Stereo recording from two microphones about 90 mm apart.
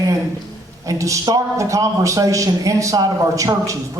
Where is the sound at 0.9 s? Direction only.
35° right (ahead or behind).